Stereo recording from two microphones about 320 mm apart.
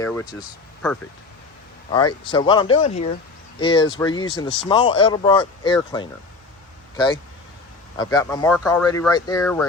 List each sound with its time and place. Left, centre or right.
0.0 s speech: centre
2.3 s speech: centre